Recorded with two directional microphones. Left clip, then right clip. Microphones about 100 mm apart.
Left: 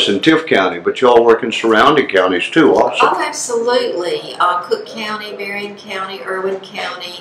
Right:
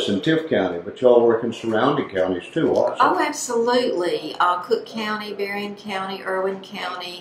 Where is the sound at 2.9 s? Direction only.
25° left (ahead or behind).